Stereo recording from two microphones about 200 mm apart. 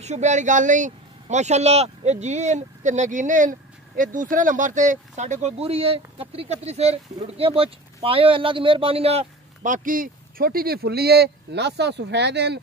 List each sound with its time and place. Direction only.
0.0 s speech: 35° right (ahead or behind); by 12.5 s 55° right (ahead or behind)